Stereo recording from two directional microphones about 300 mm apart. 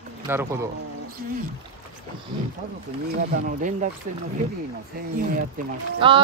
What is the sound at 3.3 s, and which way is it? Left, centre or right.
Speech, right.